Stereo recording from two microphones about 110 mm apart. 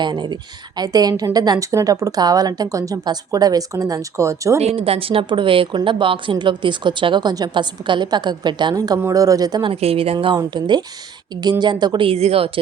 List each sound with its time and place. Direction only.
0.0 s a woman's voice: 40° right (ahead or behind)
4.6 s a woman's voice: 60° right (ahead or behind); by 9.0 s 40° right (ahead or behind)
9.0 s a woman's voice: 30° right (ahead or behind)
9.8 s a woman's voice: 60° right (ahead or behind)
10.3 s a woman's voice: 40° right (ahead or behind)
12.0 s a woman's voice: 65° right (ahead or behind)